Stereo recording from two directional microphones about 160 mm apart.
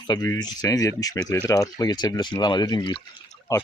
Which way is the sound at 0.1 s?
25° left (ahead or behind).